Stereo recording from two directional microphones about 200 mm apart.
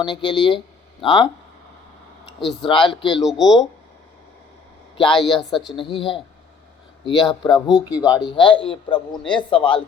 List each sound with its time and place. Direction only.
0.0 s a man's voice: 25° left (ahead or behind)
2.4 s speech: centre (ahead or behind)
2.6 s a man's voice: 25° left (ahead or behind)
3.2 s speech: centre (ahead or behind)
4.9 s a man's voice: 25° left (ahead or behind)
5.4 s speech: centre (ahead or behind)
5.7 s a man's voice: 25° left (ahead or behind)